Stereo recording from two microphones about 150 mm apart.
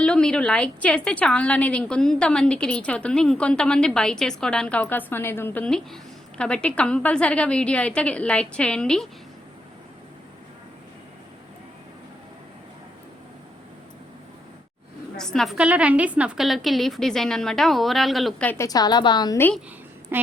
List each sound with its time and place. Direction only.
0.0 s a woman's voice: 5° left (ahead or behind)
5.6 s a woman's voice: 5° left (ahead or behind)
15.1 s a woman's voice: 5° left (ahead or behind)
18.6 s a woman's voice: 25° left (ahead or behind)